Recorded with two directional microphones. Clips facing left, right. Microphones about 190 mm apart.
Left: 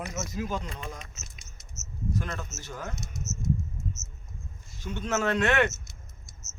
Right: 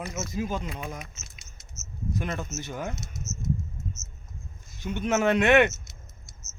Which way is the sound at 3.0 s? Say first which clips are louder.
Left 1 dB; centre (ahead or behind).